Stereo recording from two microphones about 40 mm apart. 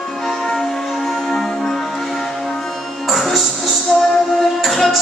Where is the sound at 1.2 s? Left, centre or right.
Centre.